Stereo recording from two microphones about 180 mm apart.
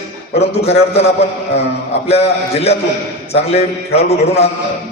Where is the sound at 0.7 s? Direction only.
35° left (ahead or behind).